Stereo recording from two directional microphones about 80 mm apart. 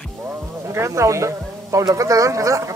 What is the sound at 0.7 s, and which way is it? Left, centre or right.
Speech, right.